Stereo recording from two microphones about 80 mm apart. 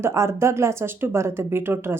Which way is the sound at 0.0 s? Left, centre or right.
Right.